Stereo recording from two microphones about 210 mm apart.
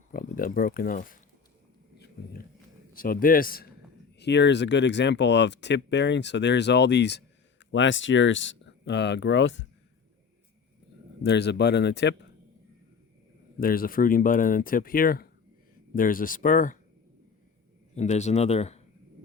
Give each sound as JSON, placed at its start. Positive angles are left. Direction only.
{"t": 0.1, "sound": "speech", "side_deg": 40}
{"t": 2.9, "sound": "a man's voice", "side_deg": 40}
{"t": 4.2, "sound": "speech", "side_deg": 55}
{"t": 11.2, "sound": "speech", "side_deg": 55}
{"t": 13.6, "sound": "speech", "side_deg": 45}
{"t": 17.9, "sound": "speech", "side_deg": 35}